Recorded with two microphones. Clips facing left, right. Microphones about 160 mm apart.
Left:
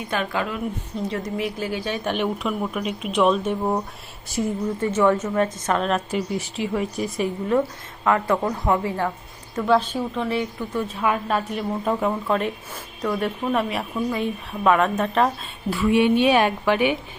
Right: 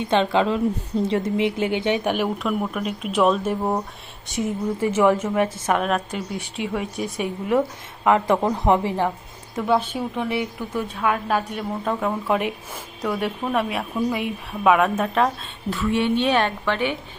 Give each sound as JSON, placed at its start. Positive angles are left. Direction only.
{"t": 0.0, "sound": "speech", "side_deg": -25}
{"t": 2.1, "sound": "a woman's voice", "side_deg": 0}
{"t": 6.1, "sound": "a woman's voice", "side_deg": 0}
{"t": 8.0, "sound": "a woman's voice", "side_deg": -20}
{"t": 10.8, "sound": "a woman's voice", "side_deg": 0}
{"t": 12.3, "sound": "a woman's voice", "side_deg": -10}
{"t": 15.7, "sound": "a woman's voice", "side_deg": 10}